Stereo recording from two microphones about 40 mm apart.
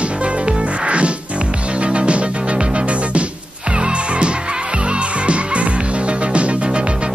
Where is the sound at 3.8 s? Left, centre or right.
Right.